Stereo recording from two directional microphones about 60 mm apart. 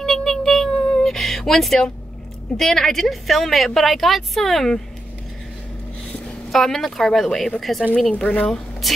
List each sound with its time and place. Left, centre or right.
0.0 s child singing: centre
2.5 s a woman's voice: centre
6.5 s a woman's voice: centre
8.2 s speech: left
8.8 s speech: centre